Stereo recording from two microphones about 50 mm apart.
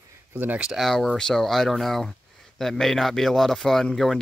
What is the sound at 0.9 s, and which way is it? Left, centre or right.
Speech, centre.